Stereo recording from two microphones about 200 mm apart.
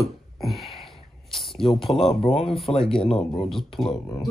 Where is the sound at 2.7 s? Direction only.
25° left (ahead or behind).